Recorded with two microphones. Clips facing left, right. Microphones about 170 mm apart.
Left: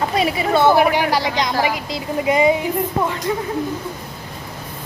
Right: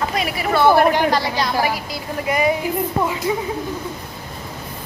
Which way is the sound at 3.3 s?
10° right (ahead or behind).